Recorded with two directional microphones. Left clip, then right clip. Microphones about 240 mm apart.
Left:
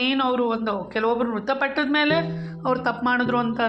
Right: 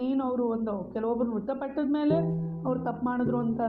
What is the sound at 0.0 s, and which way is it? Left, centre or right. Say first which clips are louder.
A woman's voice: left 7 dB; left.